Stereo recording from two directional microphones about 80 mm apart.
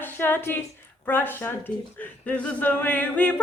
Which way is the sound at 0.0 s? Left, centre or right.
Left.